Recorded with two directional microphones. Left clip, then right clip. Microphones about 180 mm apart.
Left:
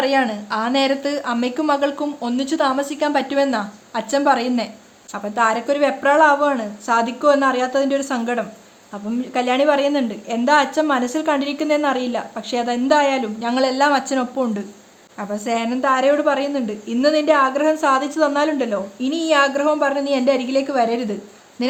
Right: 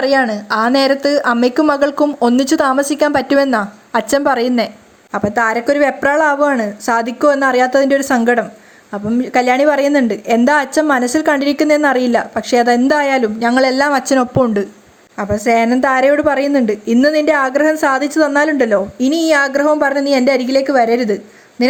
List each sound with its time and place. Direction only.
0.0 s a woman's voice: 30° right (ahead or behind)